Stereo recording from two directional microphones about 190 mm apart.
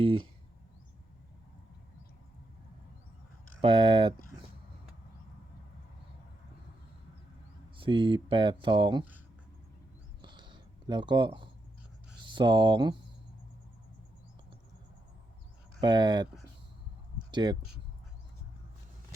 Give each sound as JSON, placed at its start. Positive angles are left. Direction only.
{"t": 0.0, "sound": "speech", "side_deg": -30}
{"t": 3.6, "sound": "speech", "side_deg": -25}
{"t": 7.8, "sound": "speech", "side_deg": -25}
{"t": 10.2, "sound": "a sound", "side_deg": -25}
{"t": 12.2, "sound": "speech", "side_deg": -25}
{"t": 15.8, "sound": "speech", "side_deg": -25}
{"t": 17.3, "sound": "speech", "side_deg": -25}